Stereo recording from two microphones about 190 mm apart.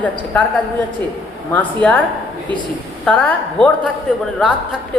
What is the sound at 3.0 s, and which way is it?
Speech, 10° left (ahead or behind).